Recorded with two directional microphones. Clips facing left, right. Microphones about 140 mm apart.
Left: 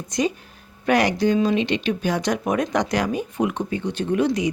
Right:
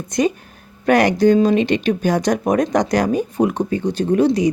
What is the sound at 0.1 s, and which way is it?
Speech, 55° right (ahead or behind).